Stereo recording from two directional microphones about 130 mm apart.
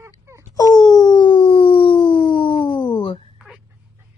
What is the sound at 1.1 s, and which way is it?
Howl, 40° left (ahead or behind).